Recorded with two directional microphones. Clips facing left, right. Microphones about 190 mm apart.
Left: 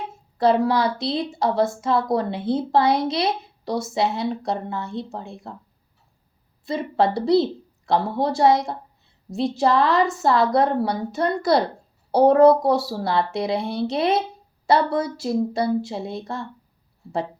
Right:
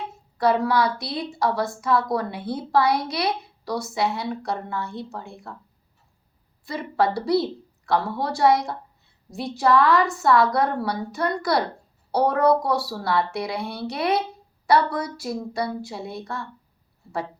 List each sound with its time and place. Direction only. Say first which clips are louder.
0.3 s a woman's voice: left 2 dB; 25° left (ahead or behind)
6.7 s a woman's voice: left 2 dB; 25° left (ahead or behind)